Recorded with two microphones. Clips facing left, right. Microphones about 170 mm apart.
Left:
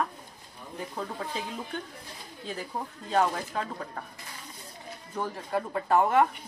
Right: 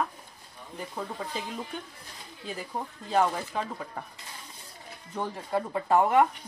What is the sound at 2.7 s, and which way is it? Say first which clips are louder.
Speech: right 1 dB; 5° right (ahead or behind).